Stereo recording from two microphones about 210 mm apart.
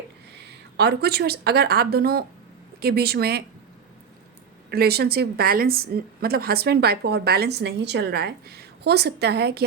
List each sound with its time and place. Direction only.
0.8 s a woman's voice: 50° right (ahead or behind)
4.7 s a woman's voice: 50° right (ahead or behind)